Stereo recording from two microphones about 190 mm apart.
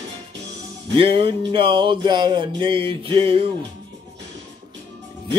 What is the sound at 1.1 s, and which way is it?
Music, 30° right (ahead or behind).